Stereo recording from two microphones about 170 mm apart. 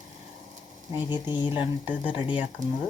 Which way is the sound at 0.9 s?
10° right (ahead or behind).